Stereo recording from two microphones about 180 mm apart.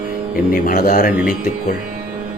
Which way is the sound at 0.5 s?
50° left (ahead or behind).